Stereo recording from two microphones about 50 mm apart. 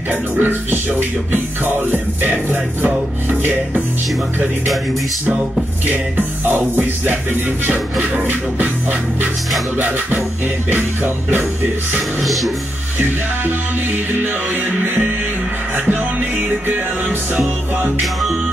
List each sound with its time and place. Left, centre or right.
0.1 s music: right
5.9 s music: right
9.8 s music: right
12.2 s music: centre
15.9 s music: right